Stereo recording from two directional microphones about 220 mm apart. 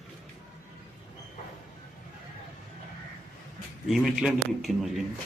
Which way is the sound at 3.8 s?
Centre (ahead or behind).